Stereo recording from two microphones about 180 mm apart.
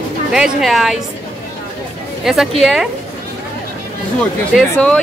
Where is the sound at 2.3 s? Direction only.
Centre (ahead or behind).